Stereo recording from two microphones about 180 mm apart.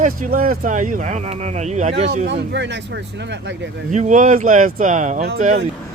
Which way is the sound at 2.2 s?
80° right.